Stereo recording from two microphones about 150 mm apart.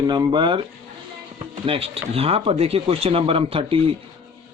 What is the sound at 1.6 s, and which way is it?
Speech, 40° right (ahead or behind).